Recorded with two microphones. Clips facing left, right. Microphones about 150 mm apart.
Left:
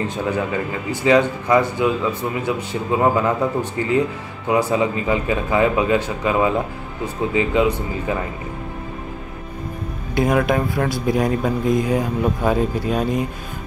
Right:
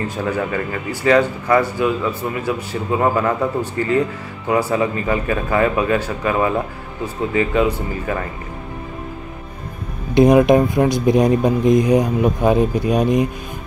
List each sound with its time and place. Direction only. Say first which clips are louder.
0.1 s a man's voice: right 1 dB; 20° left (ahead or behind)
10.1 s speech: right 7 dB; 20° right (ahead or behind)